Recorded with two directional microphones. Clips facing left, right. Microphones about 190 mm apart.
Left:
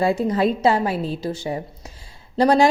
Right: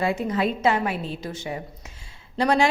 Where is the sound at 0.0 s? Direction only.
35° left (ahead or behind).